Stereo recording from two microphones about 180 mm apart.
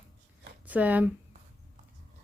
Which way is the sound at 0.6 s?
10° right (ahead or behind).